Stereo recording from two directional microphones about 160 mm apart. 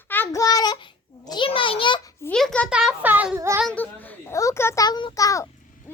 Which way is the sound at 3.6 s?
10° left (ahead or behind).